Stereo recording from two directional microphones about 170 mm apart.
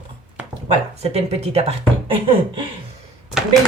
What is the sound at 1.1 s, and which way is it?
Speech, 40° right (ahead or behind).